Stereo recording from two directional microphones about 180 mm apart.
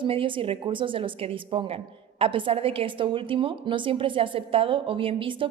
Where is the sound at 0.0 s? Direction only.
30° right (ahead or behind).